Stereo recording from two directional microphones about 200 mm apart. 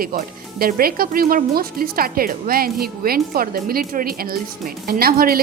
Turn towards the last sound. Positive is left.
turn(degrees=-50)  # may be behind; listen again after turning